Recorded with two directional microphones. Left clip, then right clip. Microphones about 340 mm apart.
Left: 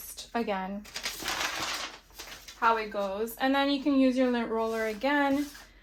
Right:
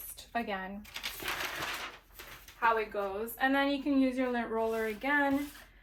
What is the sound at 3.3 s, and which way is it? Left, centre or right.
A woman's voice, left.